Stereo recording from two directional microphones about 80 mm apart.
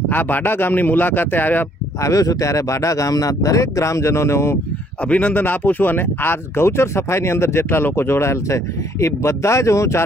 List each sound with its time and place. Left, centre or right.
0.1 s a man's voice: left
2.0 s speech: left
5.1 s speech: centre; by 10.0 s left